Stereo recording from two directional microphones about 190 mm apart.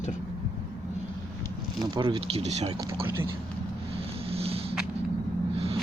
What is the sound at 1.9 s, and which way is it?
Speech, 25° right (ahead or behind).